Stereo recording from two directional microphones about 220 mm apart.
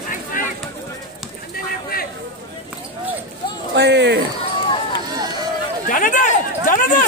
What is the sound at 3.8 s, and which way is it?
Speech, 50° right (ahead or behind).